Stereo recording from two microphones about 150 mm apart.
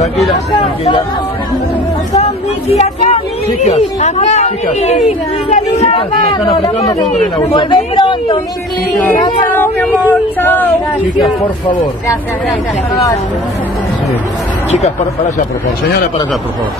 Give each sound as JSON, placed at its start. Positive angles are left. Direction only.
{"t": 2.7, "sound": "speech", "side_deg": 45}
{"t": 6.3, "sound": "speech", "side_deg": 25}
{"t": 9.6, "sound": "speech", "side_deg": 15}